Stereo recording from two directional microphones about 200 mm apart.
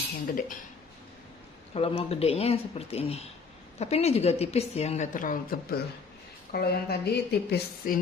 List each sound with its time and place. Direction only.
0.3 s speech: 45° left (ahead or behind)
1.7 s a woman's voice: 30° left (ahead or behind); by 7.9 s 55° left (ahead or behind)